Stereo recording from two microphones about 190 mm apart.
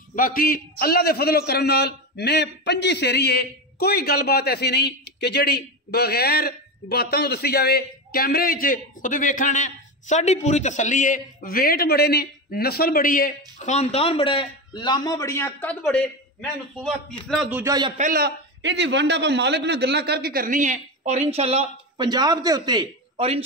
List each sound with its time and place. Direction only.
0.1 s a man's voice: 50° left (ahead or behind); by 17.6 s 5° right (ahead or behind)
17.6 s a man's voice: 20° right (ahead or behind)
17.9 s a man's voice: 45° right (ahead or behind)
18.6 s a man's voice: 70° right (ahead or behind); by 23.4 s 30° right (ahead or behind)